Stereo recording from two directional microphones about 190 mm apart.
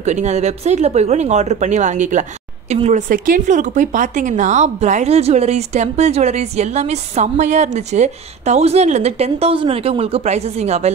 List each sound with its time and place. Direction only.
0.0 s speech: 35° right (ahead or behind)